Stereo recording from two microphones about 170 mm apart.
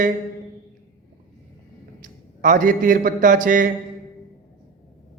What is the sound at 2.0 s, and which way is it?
A man's voice, 50° right (ahead or behind).